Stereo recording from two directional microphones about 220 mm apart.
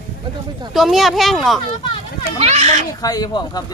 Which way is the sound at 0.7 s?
Centre (ahead or behind).